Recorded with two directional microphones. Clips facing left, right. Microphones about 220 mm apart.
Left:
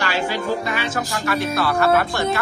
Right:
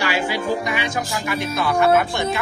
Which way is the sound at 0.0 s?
10° right (ahead or behind).